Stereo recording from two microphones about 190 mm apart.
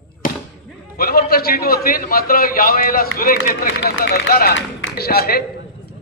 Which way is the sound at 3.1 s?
65° left (ahead or behind).